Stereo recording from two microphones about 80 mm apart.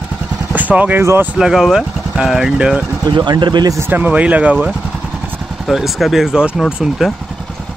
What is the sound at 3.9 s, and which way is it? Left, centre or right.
Speech, right.